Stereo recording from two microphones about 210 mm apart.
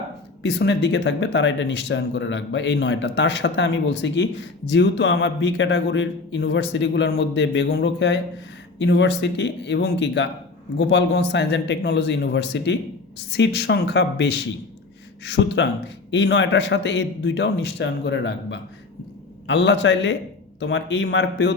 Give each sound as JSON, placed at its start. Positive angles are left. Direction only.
{"t": 0.4, "sound": "speech", "side_deg": 55}